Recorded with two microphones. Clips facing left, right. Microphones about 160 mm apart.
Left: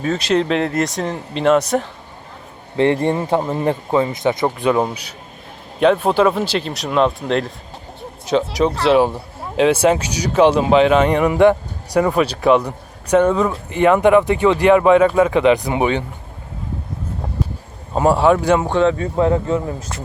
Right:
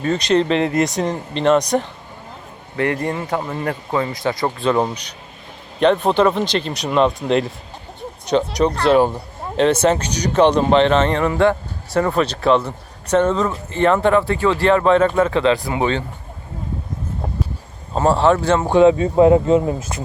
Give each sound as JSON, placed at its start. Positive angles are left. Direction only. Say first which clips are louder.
{"t": 0.0, "sound": "speech", "louder": "right 1 dB", "side_deg": 5}
{"t": 2.7, "sound": "speech", "louder": "left 5 dB", "side_deg": 25}
{"t": 17.9, "sound": "speech", "louder": "left 1 dB", "side_deg": 10}
{"t": 18.6, "sound": "speech", "louder": "right 4 dB", "side_deg": -15}